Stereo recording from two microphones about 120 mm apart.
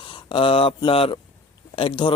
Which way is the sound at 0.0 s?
45° left (ahead or behind).